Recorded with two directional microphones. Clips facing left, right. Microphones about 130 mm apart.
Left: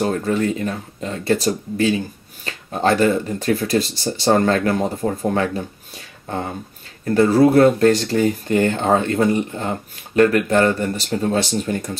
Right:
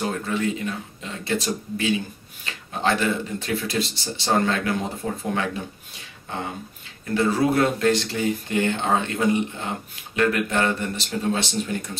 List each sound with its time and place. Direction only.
0.0 s speech: 40° left (ahead or behind)
7.1 s speech: 40° left (ahead or behind)